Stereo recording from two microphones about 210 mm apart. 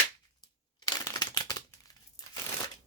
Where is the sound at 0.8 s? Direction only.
20° left (ahead or behind).